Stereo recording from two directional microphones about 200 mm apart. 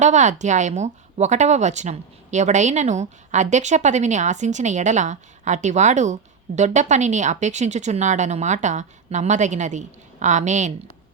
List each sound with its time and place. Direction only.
0.0 s speech: 35° right (ahead or behind)